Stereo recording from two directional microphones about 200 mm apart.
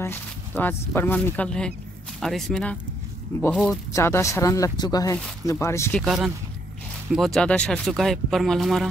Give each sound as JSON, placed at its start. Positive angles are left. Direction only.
{"t": 0.0, "sound": "speech", "side_deg": 10}
{"t": 5.9, "sound": "speech", "side_deg": -5}